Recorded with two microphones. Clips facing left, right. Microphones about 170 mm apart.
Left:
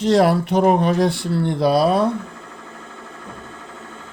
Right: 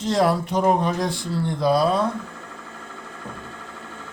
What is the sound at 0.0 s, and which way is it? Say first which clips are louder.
Speech: left 5 dB; 70° left (ahead or behind).